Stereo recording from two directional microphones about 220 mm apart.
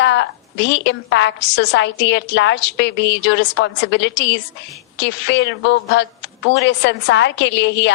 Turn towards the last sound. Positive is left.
turn(degrees=55)  # may be behind; listen again after turning